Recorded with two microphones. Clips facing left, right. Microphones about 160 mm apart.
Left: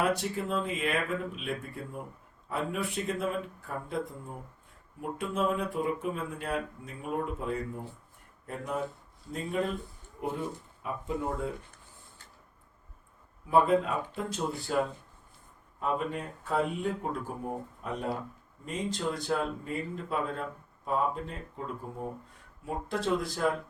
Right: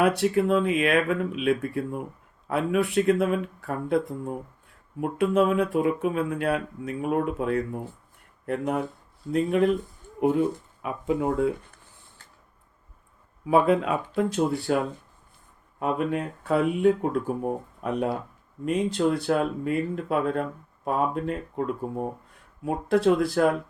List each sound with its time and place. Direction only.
0.0 s speech: 70° right (ahead or behind)
4.9 s speech: 70° right (ahead or behind)
13.5 s speech: 80° right
15.8 s speech: 70° right (ahead or behind)